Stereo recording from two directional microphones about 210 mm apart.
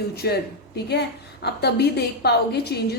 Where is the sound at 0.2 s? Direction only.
50° left (ahead or behind).